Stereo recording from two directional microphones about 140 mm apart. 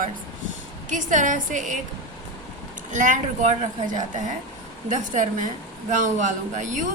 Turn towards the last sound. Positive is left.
turn(degrees=-65)  # may be behind; listen again after turning